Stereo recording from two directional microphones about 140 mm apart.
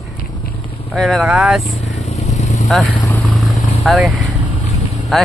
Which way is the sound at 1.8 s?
55° left (ahead or behind).